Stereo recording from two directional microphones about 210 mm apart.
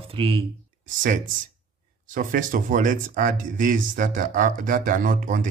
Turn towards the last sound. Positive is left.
turn(degrees=-40)  # may be behind; listen again after turning